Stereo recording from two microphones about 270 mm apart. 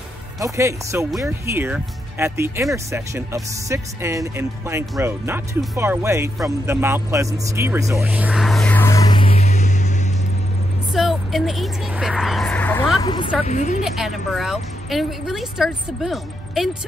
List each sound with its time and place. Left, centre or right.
0.4 s speech: centre; by 9.8 s left
10.9 s speech: centre
13.0 s speech: centre
13.5 s speech: left
13.8 s a woman's voice: centre